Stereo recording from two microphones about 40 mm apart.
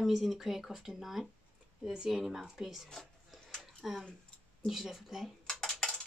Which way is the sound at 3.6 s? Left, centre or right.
Centre.